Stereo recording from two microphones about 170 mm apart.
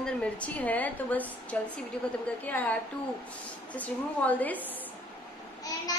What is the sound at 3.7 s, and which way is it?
Speech, 10° left (ahead or behind).